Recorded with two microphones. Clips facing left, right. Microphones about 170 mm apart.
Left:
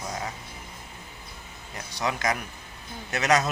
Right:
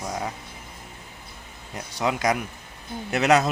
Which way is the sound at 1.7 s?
25° right (ahead or behind).